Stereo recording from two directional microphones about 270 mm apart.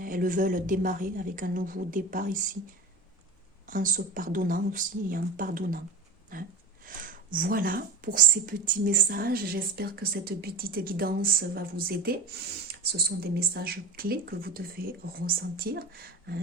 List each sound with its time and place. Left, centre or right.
0.0 s speech: right
3.7 s speech: right
6.9 s a sound: right
7.3 s speech: right